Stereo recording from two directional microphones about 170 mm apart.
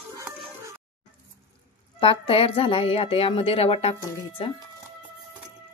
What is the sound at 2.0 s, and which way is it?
Speech, 35° left (ahead or behind).